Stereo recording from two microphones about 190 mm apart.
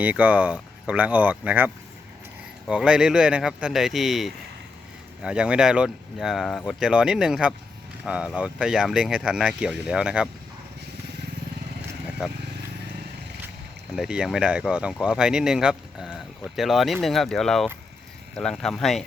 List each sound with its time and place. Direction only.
0.0 s speech: 10° right (ahead or behind)
13.9 s speech: 5° right (ahead or behind)